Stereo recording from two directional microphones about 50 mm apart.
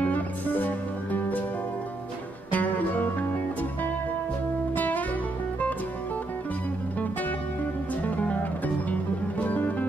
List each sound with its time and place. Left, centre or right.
0.0 s music: left
2.5 s music: left
4.7 s music: left
8.0 s music: left